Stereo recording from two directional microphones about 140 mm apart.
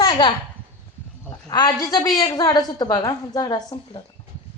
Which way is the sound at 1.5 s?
30° left (ahead or behind).